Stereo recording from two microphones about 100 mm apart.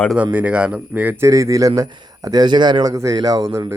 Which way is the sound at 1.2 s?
35° right (ahead or behind).